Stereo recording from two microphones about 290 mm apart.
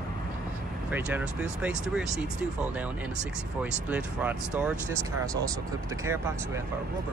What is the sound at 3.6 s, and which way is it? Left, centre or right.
Speech, centre.